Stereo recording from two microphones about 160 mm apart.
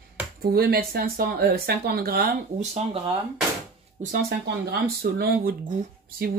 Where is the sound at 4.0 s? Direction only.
60° right (ahead or behind).